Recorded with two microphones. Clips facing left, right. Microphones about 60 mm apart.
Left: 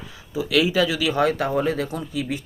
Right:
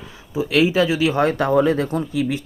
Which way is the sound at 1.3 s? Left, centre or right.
Right.